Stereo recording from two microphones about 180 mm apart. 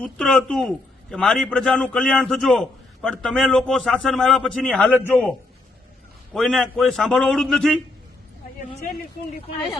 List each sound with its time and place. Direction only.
0.0 s a man's voice: 5° left (ahead or behind)
6.3 s a man's voice: centre (ahead or behind)